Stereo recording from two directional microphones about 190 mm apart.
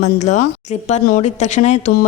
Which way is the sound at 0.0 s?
40° left (ahead or behind).